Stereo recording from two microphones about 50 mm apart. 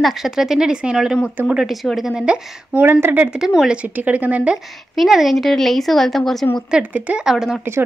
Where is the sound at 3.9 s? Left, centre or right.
Right.